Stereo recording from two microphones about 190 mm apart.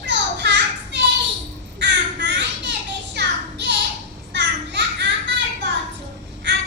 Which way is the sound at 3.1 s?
65° right (ahead or behind).